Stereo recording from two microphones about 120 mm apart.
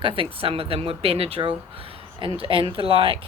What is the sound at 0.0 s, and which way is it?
Speech, 50° right (ahead or behind).